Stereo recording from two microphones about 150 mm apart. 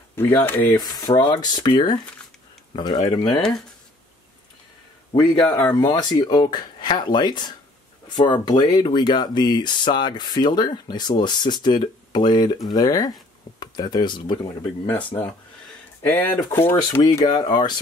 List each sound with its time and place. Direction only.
0.1 s speech: 15° left (ahead or behind)
0.7 s speech: 25° left (ahead or behind)
5.5 s speech: 20° left (ahead or behind)
14.9 s speech: 10° left (ahead or behind)
17.0 s speech: 25° left (ahead or behind)